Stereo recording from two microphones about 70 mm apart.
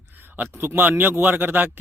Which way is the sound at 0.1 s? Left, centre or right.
Right.